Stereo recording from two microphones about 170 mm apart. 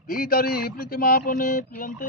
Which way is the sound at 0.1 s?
55° left (ahead or behind).